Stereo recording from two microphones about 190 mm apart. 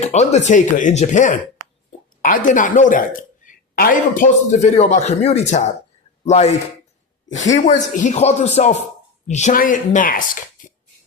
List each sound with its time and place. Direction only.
0.0 s a woman's voice: 35° left (ahead or behind)
7.3 s speech: 80° left
7.5 s a woman's voice: 40° left (ahead or behind)